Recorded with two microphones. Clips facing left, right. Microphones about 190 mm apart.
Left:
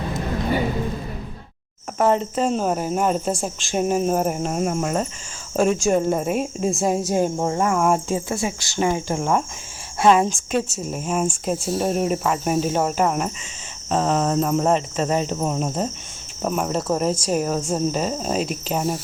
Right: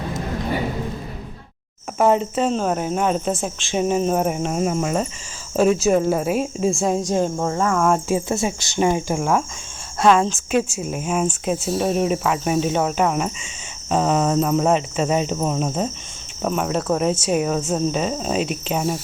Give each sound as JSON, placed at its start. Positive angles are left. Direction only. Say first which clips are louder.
{"t": 2.0, "sound": "speech", "louder": "right 2 dB", "side_deg": -5}
{"t": 2.5, "sound": "speech", "louder": "even", "side_deg": 5}
{"t": 7.3, "sound": "cricket", "louder": "even", "side_deg": 25}
{"t": 8.3, "sound": "speech", "louder": "right 3 dB", "side_deg": -25}
{"t": 9.1, "sound": "speech", "louder": "right 1 dB", "side_deg": -5}
{"t": 10.1, "sound": "cricket", "louder": "even", "side_deg": 10}
{"t": 10.5, "sound": "speech", "louder": "right 3 dB", "side_deg": -5}
{"t": 16.8, "sound": "cricket", "louder": "right 1 dB", "side_deg": 5}
{"t": 17.1, "sound": "speech", "louder": "right 2 dB", "side_deg": -5}